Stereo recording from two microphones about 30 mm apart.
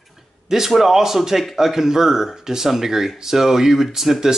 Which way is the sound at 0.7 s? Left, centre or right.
Centre.